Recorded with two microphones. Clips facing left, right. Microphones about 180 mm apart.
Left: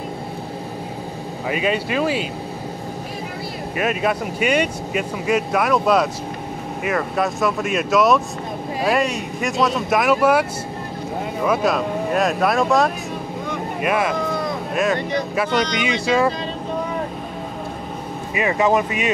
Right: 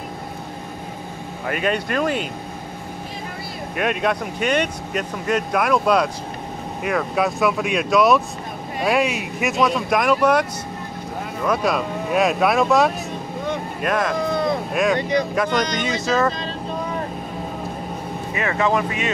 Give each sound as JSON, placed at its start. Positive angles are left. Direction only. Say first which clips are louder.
{"t": 1.5, "sound": "speech", "louder": "left 1 dB", "side_deg": 5}
{"t": 3.7, "sound": "speech", "louder": "even", "side_deg": 5}
{"t": 11.4, "sound": "speech", "louder": "left 1 dB", "side_deg": 5}
{"t": 18.3, "sound": "speech", "louder": "left 3 dB", "side_deg": 15}